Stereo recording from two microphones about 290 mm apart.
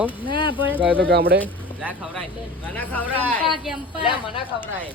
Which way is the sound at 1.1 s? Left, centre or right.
Right.